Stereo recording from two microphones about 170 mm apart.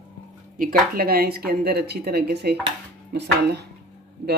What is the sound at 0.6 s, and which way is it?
Speech, 60° right (ahead or behind).